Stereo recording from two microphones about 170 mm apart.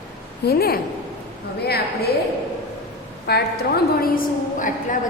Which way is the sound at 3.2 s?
70° left (ahead or behind).